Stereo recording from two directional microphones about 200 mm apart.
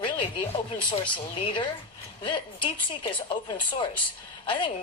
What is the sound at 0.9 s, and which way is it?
A woman's voice, 25° left (ahead or behind).